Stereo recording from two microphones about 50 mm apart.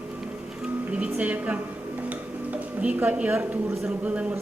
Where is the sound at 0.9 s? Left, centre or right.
Right.